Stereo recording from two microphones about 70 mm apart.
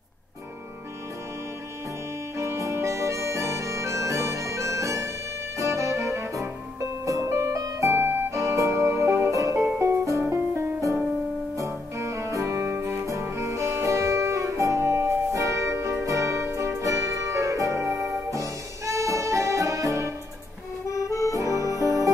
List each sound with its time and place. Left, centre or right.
2.3 s harmonica: right
5.6 s music: right
13.0 s music: right
21.1 s music: left